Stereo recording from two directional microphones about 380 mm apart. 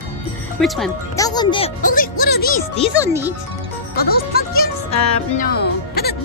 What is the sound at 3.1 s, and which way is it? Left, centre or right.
Speech, centre.